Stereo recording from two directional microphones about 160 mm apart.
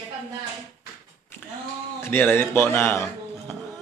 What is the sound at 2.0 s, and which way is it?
A man's voice, 15° left (ahead or behind).